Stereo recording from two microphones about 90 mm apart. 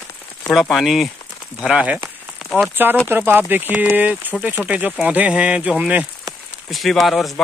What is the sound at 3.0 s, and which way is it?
Speech, 25° right (ahead or behind).